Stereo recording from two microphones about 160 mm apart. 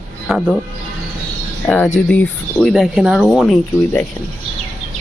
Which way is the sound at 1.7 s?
10° left (ahead or behind).